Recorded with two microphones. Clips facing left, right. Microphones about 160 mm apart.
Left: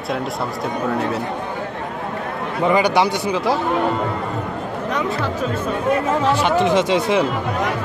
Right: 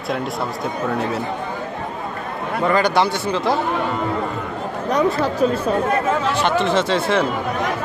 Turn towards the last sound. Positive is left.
turn(degrees=15)  # may be behind; listen again after turning